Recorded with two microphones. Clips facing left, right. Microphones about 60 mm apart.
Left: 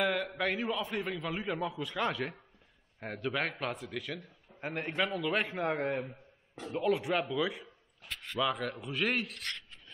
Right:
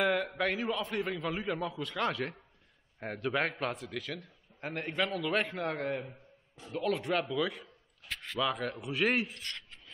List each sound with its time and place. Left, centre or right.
0.0 s a man's voice: centre
5.7 s a man's voice: centre
6.7 s speech: centre